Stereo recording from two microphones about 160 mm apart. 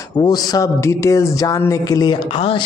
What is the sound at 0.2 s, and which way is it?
Speech, 25° left (ahead or behind).